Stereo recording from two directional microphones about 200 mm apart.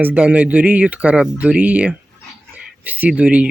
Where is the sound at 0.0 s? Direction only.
5° right (ahead or behind).